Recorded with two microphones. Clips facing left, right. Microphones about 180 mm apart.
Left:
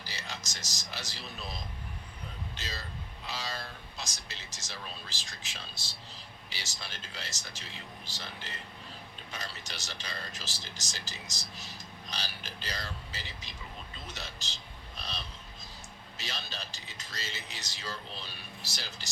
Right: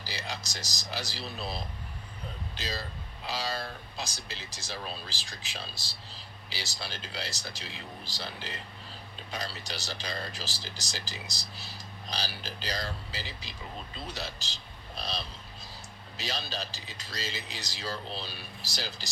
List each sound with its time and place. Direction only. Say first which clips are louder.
0.1 s speech: right 6 dB; 35° right (ahead or behind)
13.9 s vehicle: right 5 dB; 35° right (ahead or behind)
16.1 s speech: right 6 dB; 35° right (ahead or behind)